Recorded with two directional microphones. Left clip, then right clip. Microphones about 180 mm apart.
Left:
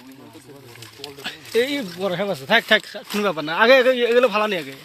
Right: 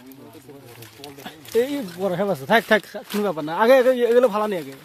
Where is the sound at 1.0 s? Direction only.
15° right (ahead or behind); by 3.0 s 35° right (ahead or behind).